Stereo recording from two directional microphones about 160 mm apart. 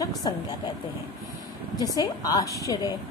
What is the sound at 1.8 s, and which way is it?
A woman's voice, 20° left (ahead or behind).